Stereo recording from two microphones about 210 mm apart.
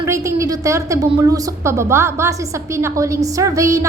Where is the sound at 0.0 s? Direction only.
15° right (ahead or behind).